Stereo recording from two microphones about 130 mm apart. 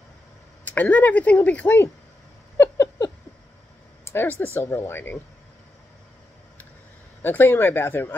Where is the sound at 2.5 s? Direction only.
20° left (ahead or behind).